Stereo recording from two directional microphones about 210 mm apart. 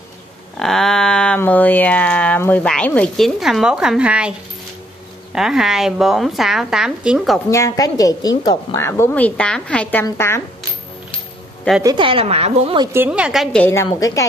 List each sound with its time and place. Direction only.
0.6 s speech: centre (ahead or behind)
7.5 s a woman's voice: 15° left (ahead or behind)
11.8 s a woman's voice: 20° right (ahead or behind); by 14.2 s 15° left (ahead or behind)